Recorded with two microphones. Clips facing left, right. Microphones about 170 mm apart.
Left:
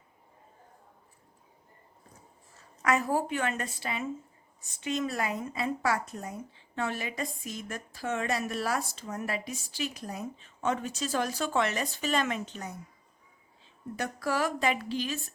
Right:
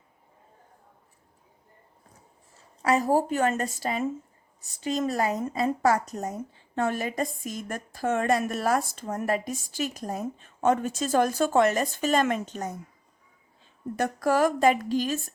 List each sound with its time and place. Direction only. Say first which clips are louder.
2.8 s a woman's voice: right 5 dB; 35° right (ahead or behind)
13.9 s a woman's voice: right 7 dB; 45° right (ahead or behind)